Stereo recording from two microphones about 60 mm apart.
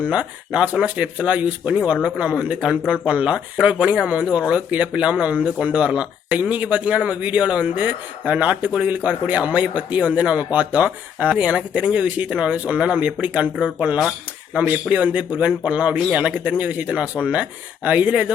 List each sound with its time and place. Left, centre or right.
0.0 s speech: centre